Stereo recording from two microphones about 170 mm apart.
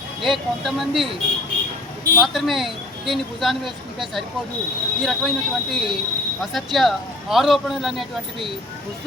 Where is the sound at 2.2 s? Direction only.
Centre (ahead or behind).